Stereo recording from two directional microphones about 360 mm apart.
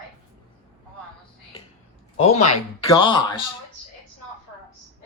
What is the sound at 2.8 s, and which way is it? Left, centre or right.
Speech, centre.